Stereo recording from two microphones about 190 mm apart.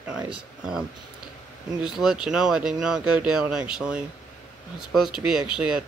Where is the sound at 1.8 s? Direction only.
5° right (ahead or behind).